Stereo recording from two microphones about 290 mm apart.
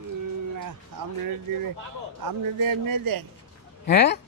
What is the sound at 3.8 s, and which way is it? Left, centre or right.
Speech, left.